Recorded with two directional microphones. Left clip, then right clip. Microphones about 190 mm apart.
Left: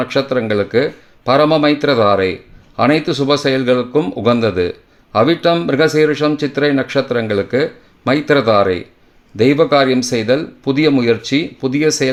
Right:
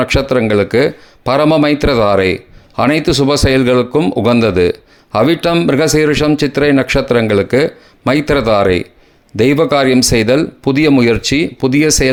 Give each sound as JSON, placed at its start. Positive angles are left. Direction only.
{"t": 0.0, "sound": "speech", "side_deg": -35}